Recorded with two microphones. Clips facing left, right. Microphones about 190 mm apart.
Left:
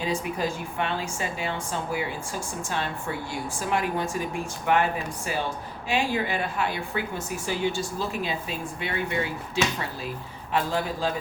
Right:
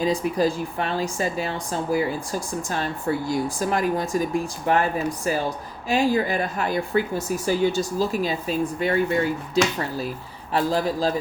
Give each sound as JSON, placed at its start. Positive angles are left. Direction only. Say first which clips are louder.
{"t": 0.0, "sound": "speech", "louder": "right 6 dB", "side_deg": -35}
{"t": 10.5, "sound": "speech", "louder": "right 4 dB", "side_deg": -40}